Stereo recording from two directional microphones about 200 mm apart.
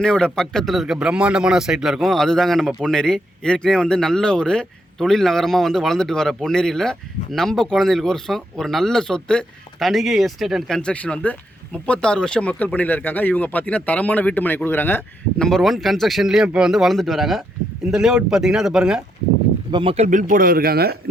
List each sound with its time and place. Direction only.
0.0 s speech: 5° left (ahead or behind)
19.7 s speech: 30° right (ahead or behind); by 20.9 s 50° right (ahead or behind)